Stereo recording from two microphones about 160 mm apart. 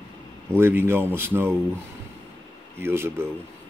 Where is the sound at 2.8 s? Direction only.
15° right (ahead or behind).